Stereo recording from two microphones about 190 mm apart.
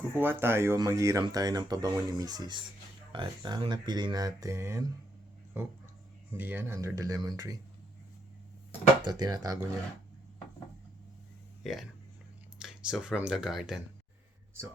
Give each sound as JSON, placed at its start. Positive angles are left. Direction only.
{"t": 0.1, "sound": "speech", "side_deg": -10}
{"t": 9.0, "sound": "speech", "side_deg": -20}
{"t": 11.6, "sound": "speech", "side_deg": 0}